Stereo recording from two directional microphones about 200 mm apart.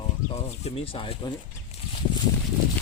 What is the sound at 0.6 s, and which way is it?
Speech, 30° left (ahead or behind).